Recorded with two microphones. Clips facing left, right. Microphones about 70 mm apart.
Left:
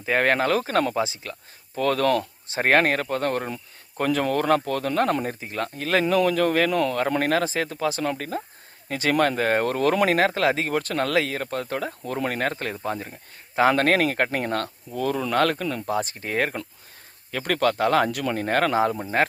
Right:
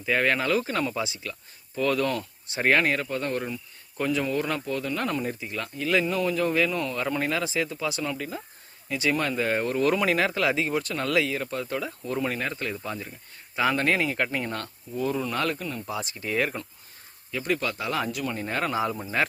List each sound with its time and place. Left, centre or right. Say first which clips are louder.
0.0 s speech: left 3 dB; left
0.7 s speech: left 5 dB; left
0.9 s speech: left 5 dB; left
1.7 s speech: left 4 dB; left
5.2 s speech: left 3 dB; left
6.1 s speech: left 5 dB; left
8.0 s speech: left 4 dB; left
10.7 s speech: left 3 dB; left
13.7 s speech: left 4 dB; left
15.9 s speech: left 3 dB; left
17.3 s speech: left 5 dB; left